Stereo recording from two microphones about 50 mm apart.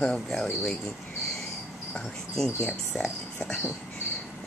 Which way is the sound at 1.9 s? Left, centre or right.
Centre.